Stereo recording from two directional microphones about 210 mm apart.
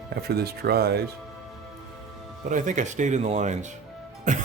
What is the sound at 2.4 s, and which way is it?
Speech, 35° right (ahead or behind).